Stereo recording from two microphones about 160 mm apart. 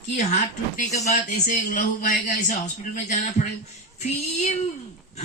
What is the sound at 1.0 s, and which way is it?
A man's voice, 45° left (ahead or behind).